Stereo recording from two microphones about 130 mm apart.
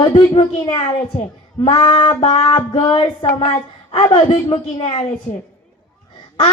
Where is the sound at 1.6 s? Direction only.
45° left (ahead or behind).